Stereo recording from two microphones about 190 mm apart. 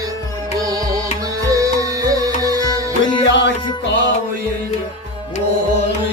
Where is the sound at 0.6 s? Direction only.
20° right (ahead or behind).